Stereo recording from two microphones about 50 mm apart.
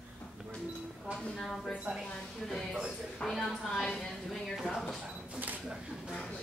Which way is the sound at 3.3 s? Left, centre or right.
Centre.